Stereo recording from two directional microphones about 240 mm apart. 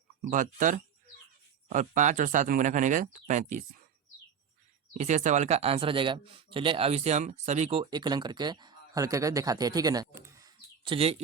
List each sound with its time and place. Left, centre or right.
0.3 s speech: right
4.9 s speech: right